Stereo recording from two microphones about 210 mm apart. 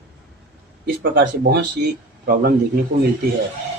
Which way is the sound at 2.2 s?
40° right (ahead or behind).